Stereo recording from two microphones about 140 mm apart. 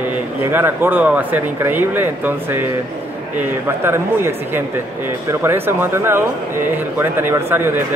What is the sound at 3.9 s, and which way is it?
Speech, 15° right (ahead or behind).